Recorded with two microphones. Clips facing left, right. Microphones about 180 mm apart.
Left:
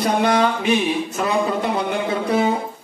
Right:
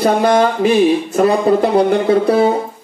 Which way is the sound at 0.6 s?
35° right (ahead or behind).